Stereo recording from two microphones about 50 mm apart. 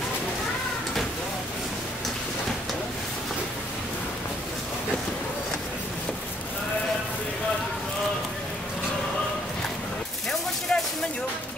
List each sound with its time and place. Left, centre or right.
10.7 s music: centre